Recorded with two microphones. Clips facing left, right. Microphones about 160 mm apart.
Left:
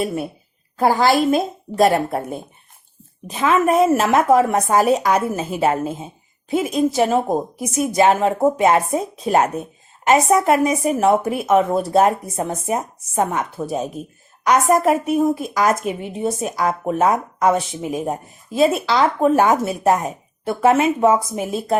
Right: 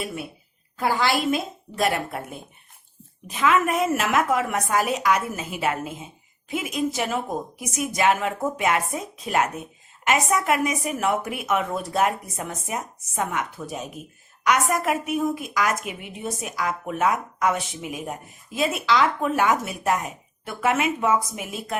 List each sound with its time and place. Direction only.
0.0 s a woman's voice: 40° left (ahead or behind)